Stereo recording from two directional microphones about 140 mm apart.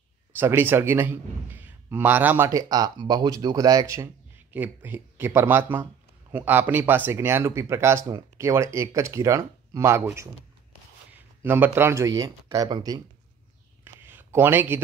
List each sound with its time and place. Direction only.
0.4 s a man's voice: 15° right (ahead or behind)
11.1 s speech: 15° right (ahead or behind)
13.8 s a sound: 15° right (ahead or behind)